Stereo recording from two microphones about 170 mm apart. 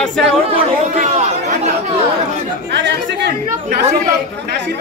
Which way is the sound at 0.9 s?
45° right (ahead or behind).